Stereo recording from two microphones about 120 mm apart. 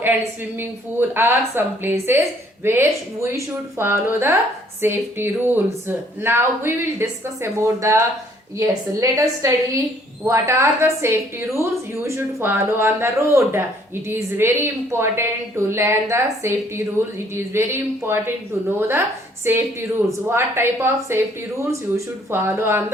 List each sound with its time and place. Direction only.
0.0 s a woman's voice: 15° right (ahead or behind)